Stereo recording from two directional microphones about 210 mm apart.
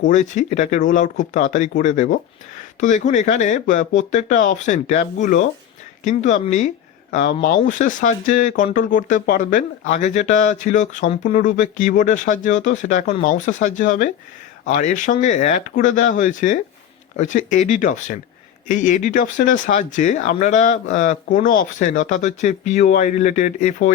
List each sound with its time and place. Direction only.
0.1 s speech: 35° left (ahead or behind)